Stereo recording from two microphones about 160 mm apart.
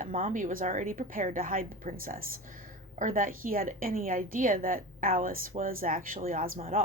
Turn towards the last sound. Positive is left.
turn(degrees=-60)  # may be behind; listen again after turning